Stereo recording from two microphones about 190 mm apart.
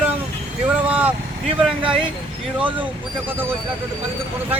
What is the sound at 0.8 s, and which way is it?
Vehicle, 10° right (ahead or behind).